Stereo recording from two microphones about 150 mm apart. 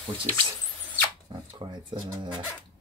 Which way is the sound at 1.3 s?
30° right (ahead or behind).